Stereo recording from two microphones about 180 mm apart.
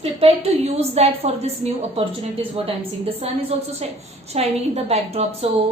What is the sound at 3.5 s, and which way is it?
A woman's voice, 35° right (ahead or behind).